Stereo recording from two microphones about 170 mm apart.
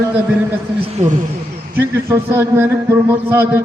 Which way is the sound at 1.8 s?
15° right (ahead or behind).